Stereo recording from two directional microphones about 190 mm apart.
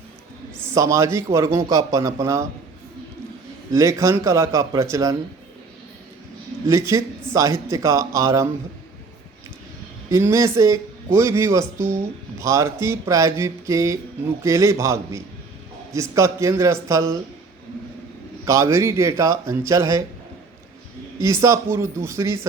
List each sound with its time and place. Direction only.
0.7 s speech: 15° right (ahead or behind)
3.7 s speech: 15° right (ahead or behind)
6.7 s speech: 15° right (ahead or behind)
10.1 s speech: 15° right (ahead or behind)
18.4 s speech: 15° right (ahead or behind)
21.2 s speech: 15° right (ahead or behind)